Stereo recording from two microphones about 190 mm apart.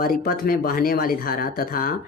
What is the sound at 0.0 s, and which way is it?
Speech, 50° left (ahead or behind).